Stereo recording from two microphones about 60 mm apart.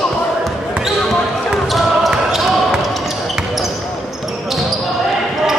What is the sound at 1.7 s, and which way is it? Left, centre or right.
Basketball bounce, centre.